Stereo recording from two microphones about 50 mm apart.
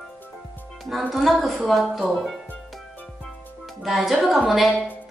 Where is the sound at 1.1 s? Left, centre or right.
Centre.